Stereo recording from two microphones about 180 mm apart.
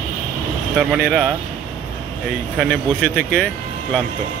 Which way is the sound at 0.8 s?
Centre (ahead or behind).